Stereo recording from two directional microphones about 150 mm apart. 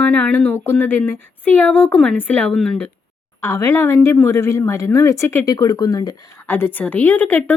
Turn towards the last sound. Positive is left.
turn(degrees=10)  # may be behind; listen again after turning